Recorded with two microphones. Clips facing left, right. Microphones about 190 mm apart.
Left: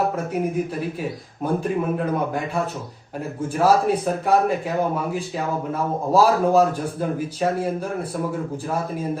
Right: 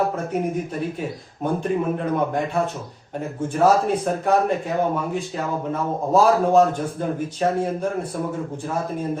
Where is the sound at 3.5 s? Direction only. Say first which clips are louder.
Even; centre (ahead or behind).